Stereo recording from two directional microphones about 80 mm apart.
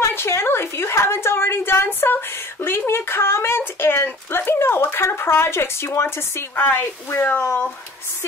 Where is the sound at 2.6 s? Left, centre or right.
Left.